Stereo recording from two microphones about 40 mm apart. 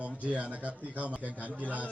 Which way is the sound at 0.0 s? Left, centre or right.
Right.